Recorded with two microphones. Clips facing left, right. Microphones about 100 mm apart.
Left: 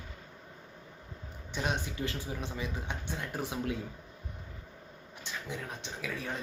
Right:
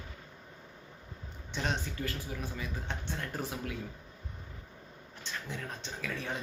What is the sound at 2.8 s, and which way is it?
Speech, 15° left (ahead or behind).